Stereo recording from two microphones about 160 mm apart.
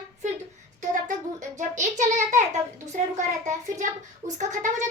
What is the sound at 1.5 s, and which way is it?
A child's voice, 50° right (ahead or behind).